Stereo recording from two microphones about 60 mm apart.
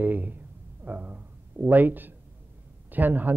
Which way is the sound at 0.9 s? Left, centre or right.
Right.